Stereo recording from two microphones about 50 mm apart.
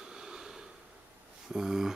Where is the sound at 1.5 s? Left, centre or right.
Centre.